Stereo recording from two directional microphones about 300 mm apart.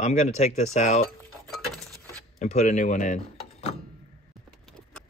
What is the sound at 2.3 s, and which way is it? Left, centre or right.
Speech, left.